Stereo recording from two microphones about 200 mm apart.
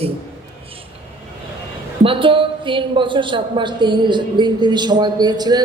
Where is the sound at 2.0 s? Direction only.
25° right (ahead or behind).